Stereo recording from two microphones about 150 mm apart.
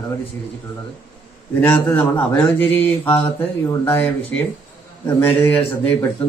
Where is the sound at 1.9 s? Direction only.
10° left (ahead or behind).